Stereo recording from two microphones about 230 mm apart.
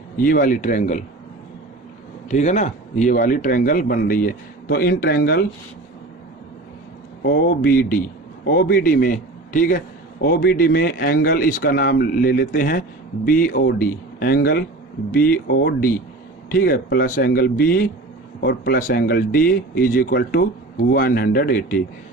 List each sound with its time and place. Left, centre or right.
0.2 s a man's voice: left
2.3 s a man's voice: left
7.2 s a man's voice: left